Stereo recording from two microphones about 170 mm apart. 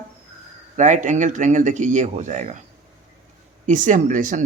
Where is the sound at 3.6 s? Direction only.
50° right (ahead or behind).